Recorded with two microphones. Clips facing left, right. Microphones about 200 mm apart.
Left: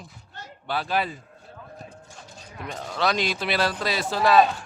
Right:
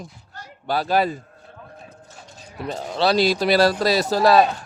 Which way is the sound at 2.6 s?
30° right (ahead or behind).